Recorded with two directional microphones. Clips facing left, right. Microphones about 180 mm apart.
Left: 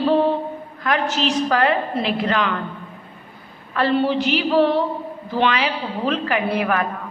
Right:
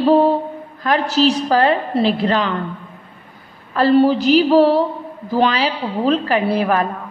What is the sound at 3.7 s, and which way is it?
A woman's voice, 40° right (ahead or behind).